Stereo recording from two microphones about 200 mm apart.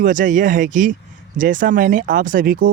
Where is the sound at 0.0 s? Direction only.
40° right (ahead or behind).